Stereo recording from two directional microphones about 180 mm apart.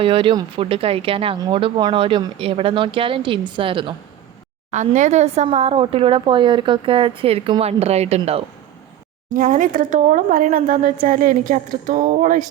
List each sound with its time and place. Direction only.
0.0 s a woman's voice: 30° right (ahead or behind)
4.7 s a woman's voice: 40° right (ahead or behind)
9.3 s speech: 50° right (ahead or behind)